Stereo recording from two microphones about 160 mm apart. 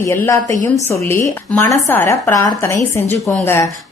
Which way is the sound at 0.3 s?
20° left (ahead or behind).